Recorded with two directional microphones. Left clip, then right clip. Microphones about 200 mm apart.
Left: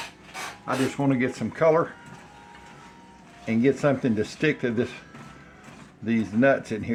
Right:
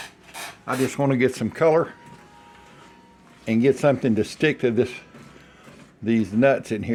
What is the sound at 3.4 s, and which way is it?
Speech, 50° right (ahead or behind).